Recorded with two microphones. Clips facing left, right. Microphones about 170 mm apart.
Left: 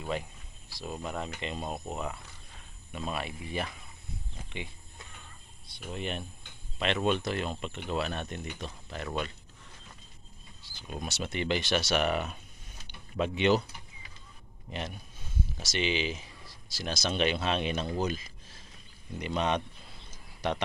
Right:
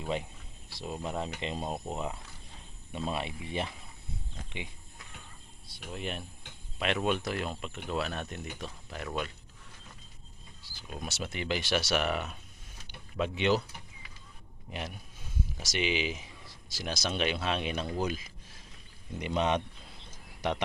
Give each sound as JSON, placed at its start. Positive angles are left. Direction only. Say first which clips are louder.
{"t": 0.7, "sound": "speech", "louder": "right 1 dB", "side_deg": -25}
{"t": 5.6, "sound": "speech", "louder": "left 2 dB", "side_deg": -5}
{"t": 10.8, "sound": "speech", "louder": "left 2 dB", "side_deg": 0}
{"t": 14.7, "sound": "speech", "louder": "left 2 dB", "side_deg": -10}
{"t": 19.2, "sound": "speech", "louder": "right 1 dB", "side_deg": -20}